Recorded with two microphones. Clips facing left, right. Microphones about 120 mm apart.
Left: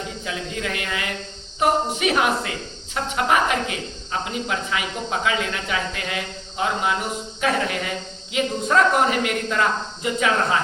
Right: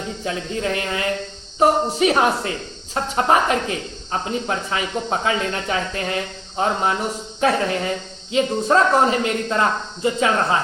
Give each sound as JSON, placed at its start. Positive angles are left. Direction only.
{"t": 0.3, "sound": "speech", "side_deg": -30}